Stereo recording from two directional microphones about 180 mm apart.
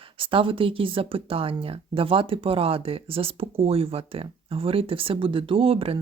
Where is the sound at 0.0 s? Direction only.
30° right (ahead or behind).